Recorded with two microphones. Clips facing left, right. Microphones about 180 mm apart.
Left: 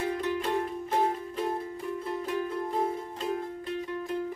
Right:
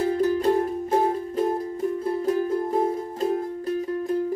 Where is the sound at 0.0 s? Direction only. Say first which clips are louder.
Right 9 dB; 35° right (ahead or behind).